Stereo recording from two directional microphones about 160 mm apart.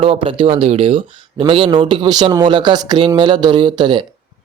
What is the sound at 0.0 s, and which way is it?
A man's voice, 35° right (ahead or behind).